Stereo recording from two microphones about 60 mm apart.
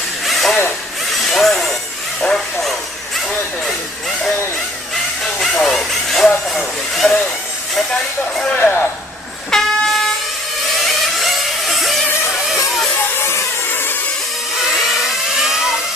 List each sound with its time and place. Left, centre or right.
0.3 s a sound: centre
1.3 s speech: centre
2.2 s vehicle: centre
5.2 s a sound: centre
8.5 s speech: left
9.5 s train: centre
10.8 s vehicle: centre
13.1 s a sound: left
14.7 s vehicle: centre